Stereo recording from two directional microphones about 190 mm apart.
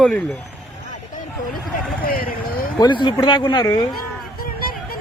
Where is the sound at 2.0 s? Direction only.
50° left (ahead or behind).